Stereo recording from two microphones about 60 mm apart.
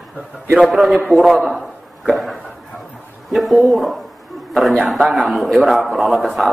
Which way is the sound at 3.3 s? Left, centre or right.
Centre.